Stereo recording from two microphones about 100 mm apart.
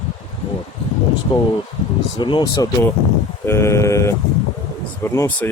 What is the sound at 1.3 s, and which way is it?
Speech, 55° left (ahead or behind).